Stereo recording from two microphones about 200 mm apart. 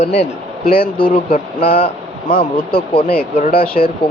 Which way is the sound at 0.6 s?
50° left (ahead or behind).